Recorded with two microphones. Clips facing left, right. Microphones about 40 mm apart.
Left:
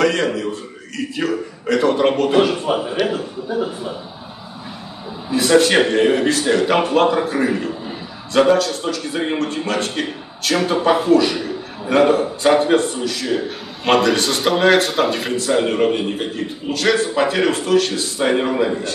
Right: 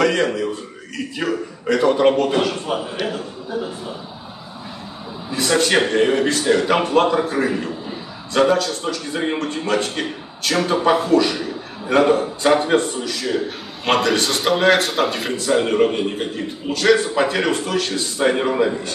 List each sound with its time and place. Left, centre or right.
0.0 s a man's voice: centre
2.4 s a man's voice: centre
5.3 s a man's voice: centre